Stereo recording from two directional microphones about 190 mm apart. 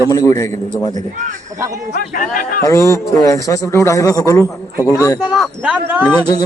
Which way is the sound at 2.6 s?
15° left (ahead or behind).